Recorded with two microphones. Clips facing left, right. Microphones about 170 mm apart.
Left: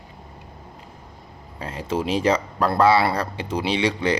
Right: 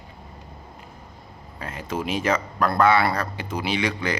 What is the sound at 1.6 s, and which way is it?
Speech, 30° left (ahead or behind).